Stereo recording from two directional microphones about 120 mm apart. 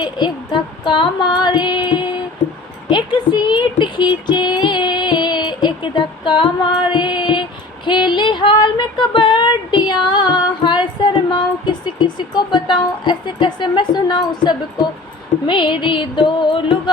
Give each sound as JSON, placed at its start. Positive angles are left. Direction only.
{"t": 0.0, "sound": "female singing", "side_deg": 40}
{"t": 2.9, "sound": "speech", "side_deg": 40}
{"t": 6.9, "sound": "female singing", "side_deg": 40}
{"t": 15.4, "sound": "music", "side_deg": 45}